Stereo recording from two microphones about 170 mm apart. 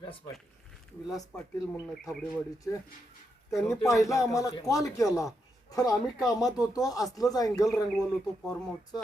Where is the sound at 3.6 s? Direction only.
15° left (ahead or behind).